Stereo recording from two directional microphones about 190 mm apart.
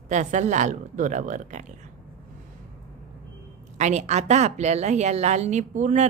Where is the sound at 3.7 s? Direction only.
35° right (ahead or behind).